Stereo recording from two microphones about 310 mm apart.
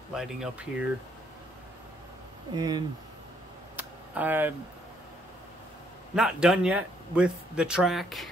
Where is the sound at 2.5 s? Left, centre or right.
Centre.